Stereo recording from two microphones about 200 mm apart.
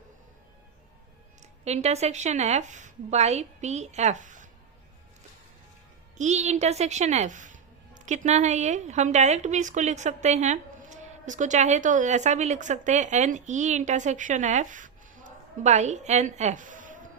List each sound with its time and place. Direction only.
1.4 s speech: 35° right (ahead or behind)
6.1 s speech: 35° right (ahead or behind)